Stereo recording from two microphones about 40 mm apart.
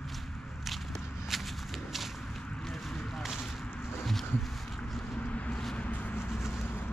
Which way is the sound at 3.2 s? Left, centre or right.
Centre.